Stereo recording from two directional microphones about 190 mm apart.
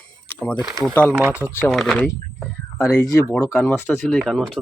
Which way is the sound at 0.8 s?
10° left (ahead or behind).